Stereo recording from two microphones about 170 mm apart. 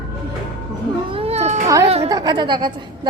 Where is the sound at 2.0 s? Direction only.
25° right (ahead or behind).